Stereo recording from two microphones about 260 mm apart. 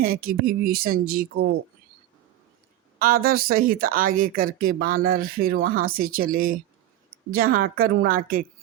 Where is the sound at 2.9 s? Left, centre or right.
Right.